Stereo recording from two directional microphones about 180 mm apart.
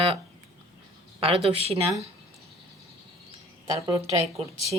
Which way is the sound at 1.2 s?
35° right (ahead or behind).